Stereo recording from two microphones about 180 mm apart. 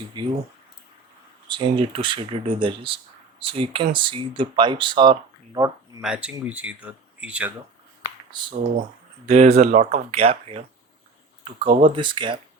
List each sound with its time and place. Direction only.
0.1 s speech: 25° right (ahead or behind)
1.5 s speech: 25° right (ahead or behind)
6.0 s speech: 5° right (ahead or behind)
8.0 s finger snapping: 25° right (ahead or behind)
9.2 s speech: 35° right (ahead or behind)
11.8 s speech: 25° right (ahead or behind)